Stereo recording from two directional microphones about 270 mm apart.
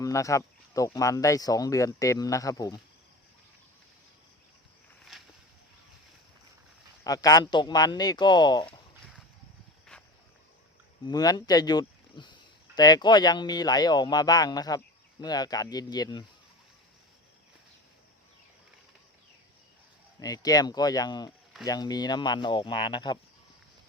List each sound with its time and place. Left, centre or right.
0.0 s speech: centre
5.1 s a sound: centre
7.0 s speech: centre
9.9 s cricket: centre
11.0 s speech: centre
20.1 s speech: centre